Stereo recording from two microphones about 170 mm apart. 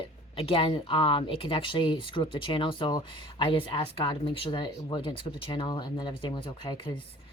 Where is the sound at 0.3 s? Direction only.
30° left (ahead or behind).